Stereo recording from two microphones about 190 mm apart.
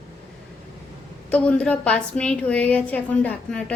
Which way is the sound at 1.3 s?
5° left (ahead or behind).